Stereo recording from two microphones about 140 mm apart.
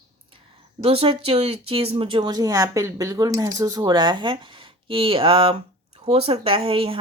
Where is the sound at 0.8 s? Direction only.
40° right (ahead or behind).